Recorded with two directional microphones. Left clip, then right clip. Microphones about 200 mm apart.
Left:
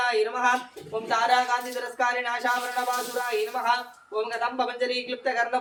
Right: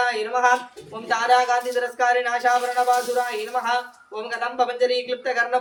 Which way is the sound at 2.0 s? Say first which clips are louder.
Right 5 dB; 20° right (ahead or behind).